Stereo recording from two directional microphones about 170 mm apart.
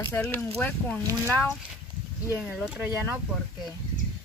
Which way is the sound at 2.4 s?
5° right (ahead or behind).